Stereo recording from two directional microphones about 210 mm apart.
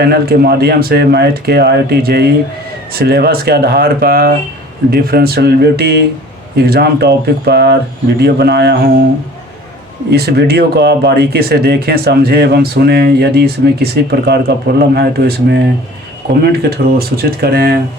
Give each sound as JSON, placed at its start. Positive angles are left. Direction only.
{"t": 0.0, "sound": "speech", "side_deg": -50}
{"t": 10.1, "sound": "speech", "side_deg": -50}